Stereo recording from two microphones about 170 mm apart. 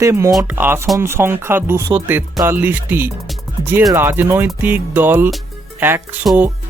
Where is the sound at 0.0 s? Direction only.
15° right (ahead or behind).